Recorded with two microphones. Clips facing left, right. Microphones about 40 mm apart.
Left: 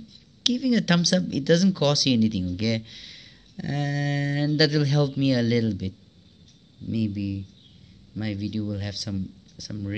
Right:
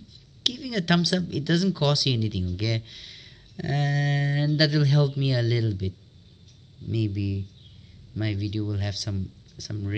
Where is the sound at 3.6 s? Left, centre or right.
Right.